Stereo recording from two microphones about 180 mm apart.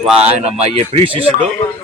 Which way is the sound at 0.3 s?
35° right (ahead or behind).